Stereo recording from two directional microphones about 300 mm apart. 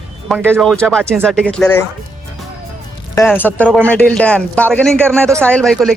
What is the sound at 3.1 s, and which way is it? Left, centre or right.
Speech, centre.